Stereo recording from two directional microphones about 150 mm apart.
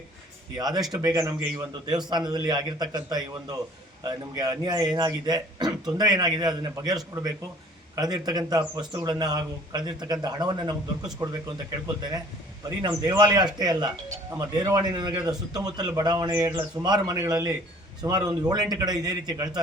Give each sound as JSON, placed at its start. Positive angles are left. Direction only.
{"t": 0.5, "sound": "a man's voice", "side_deg": -25}
{"t": 12.6, "sound": "a man's voice", "side_deg": -30}